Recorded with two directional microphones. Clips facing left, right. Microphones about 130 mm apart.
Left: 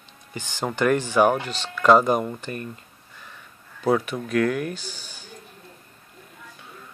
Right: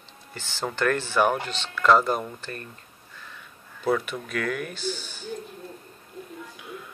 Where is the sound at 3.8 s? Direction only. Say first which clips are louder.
Left 3 dB; 15° left (ahead or behind).